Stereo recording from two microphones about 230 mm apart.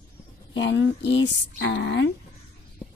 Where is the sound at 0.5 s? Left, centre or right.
Left.